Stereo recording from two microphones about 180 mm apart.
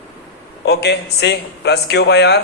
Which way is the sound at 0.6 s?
65° left (ahead or behind).